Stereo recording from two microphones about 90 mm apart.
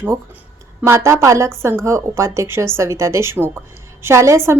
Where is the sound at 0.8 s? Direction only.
30° right (ahead or behind).